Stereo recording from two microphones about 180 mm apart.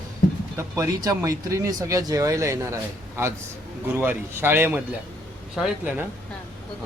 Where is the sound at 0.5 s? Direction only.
20° right (ahead or behind).